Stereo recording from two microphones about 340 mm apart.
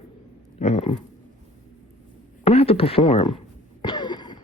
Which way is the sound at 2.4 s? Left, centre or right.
Centre.